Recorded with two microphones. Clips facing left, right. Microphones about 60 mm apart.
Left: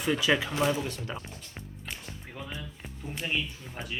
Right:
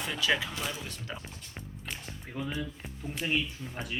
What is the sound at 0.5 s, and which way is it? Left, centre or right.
Speech, left.